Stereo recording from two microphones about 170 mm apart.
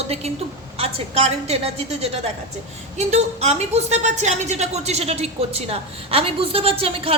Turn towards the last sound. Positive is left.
turn(degrees=-35)  # may be behind; listen again after turning